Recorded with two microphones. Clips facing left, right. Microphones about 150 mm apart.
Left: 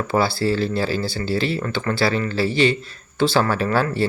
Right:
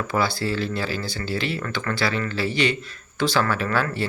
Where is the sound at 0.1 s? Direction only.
30° left (ahead or behind).